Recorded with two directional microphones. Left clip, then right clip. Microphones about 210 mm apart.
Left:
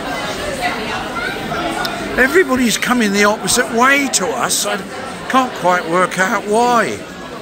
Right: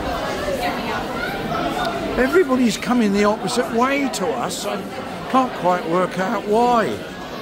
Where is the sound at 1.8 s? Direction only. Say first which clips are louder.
Left 7 dB; 5° right (ahead or behind).